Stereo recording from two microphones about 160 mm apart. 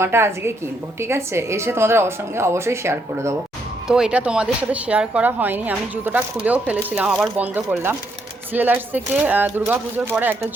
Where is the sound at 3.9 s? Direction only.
5° right (ahead or behind).